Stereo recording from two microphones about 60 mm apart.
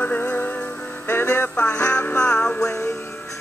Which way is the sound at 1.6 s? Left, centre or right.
Left.